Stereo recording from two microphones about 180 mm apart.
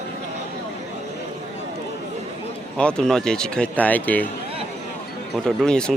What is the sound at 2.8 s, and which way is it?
Speech, 5° left (ahead or behind).